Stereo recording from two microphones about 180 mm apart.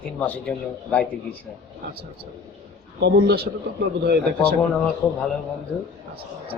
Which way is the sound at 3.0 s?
65° right (ahead or behind).